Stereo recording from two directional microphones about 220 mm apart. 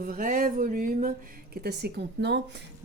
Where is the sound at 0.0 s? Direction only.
40° right (ahead or behind).